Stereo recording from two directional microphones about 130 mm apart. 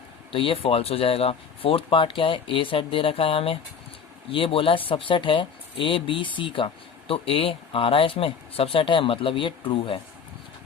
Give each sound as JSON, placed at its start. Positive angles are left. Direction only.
{"t": 0.3, "sound": "speech", "side_deg": 45}